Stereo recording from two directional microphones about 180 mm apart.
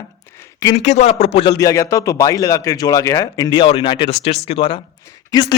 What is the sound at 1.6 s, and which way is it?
A man's voice, 15° left (ahead or behind).